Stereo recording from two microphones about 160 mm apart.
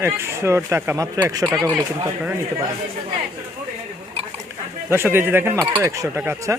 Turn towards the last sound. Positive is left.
turn(degrees=-15)  # may be behind; listen again after turning